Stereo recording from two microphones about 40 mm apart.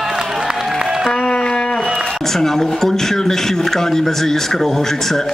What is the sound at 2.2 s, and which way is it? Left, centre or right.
Speech, centre.